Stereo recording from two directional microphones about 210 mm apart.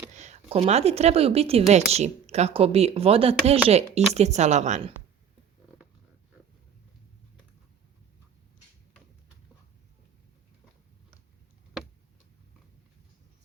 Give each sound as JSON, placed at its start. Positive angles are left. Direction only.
{"t": 0.2, "sound": "a woman's voice", "side_deg": -30}